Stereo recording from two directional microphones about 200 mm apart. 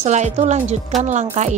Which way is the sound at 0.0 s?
35° right (ahead or behind).